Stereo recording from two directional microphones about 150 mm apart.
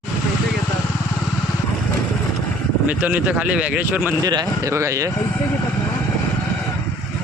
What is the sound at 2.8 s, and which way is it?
Speech, 10° right (ahead or behind).